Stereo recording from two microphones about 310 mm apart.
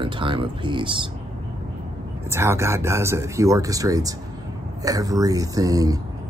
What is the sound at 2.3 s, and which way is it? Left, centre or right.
Speech, centre.